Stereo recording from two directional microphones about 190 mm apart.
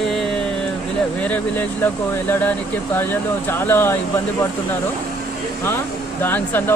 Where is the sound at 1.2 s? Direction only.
10° left (ahead or behind).